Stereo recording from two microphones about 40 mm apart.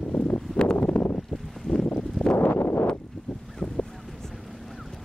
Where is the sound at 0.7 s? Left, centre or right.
Left.